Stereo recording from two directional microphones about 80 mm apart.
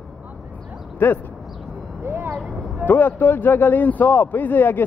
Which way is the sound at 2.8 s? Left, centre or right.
Left.